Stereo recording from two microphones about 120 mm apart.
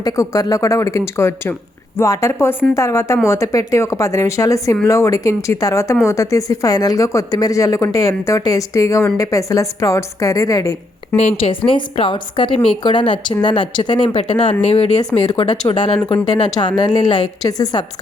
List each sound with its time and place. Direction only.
0.0 s speech: 30° left (ahead or behind)
11.2 s speech: 60° left (ahead or behind)
11.7 s speech: 45° left (ahead or behind)
14.6 s speech: 65° left (ahead or behind)
15.6 s a woman's voice: 40° left (ahead or behind)